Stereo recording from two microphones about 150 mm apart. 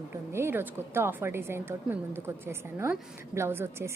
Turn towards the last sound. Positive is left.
turn(degrees=-15)  # may be behind; listen again after turning